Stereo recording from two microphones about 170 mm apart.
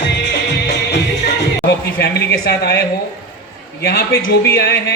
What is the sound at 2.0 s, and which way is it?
Speech, 70° left (ahead or behind).